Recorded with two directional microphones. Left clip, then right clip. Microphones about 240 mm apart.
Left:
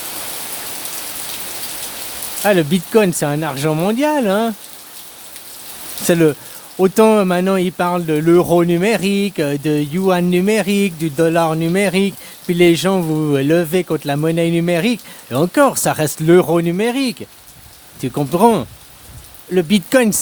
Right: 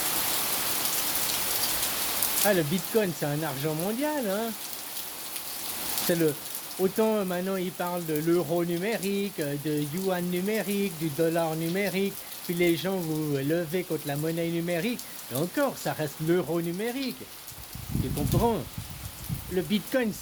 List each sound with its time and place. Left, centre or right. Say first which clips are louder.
2.4 s speech: left 12 dB; left
6.1 s speech: left 13 dB; left
18.3 s speech: left 15 dB; left